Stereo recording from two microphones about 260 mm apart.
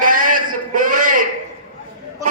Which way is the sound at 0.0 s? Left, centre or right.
Right.